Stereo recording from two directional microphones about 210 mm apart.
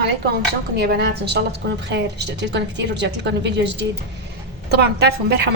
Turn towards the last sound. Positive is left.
turn(degrees=-50)  # may be behind; listen again after turning